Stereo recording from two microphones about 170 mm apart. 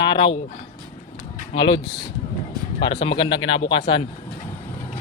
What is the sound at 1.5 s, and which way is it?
Speech, 30° left (ahead or behind).